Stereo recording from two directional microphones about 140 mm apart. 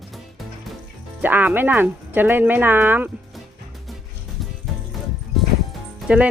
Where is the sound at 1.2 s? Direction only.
15° right (ahead or behind).